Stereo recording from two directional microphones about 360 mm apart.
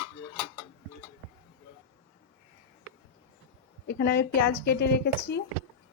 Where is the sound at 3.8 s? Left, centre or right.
Left.